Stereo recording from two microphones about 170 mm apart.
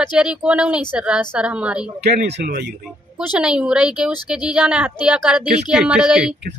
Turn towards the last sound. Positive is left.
turn(degrees=-5)  # may be behind; listen again after turning